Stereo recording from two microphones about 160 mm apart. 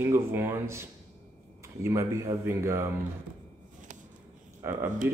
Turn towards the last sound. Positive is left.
turn(degrees=-15)  # may be behind; listen again after turning